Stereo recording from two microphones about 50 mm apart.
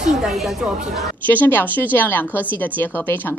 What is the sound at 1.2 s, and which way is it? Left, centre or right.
A woman's voice, left.